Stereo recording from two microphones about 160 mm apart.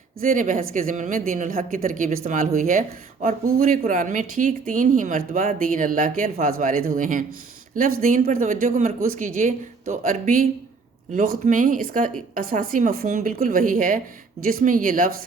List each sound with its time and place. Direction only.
0.2 s speech: 55° right (ahead or behind)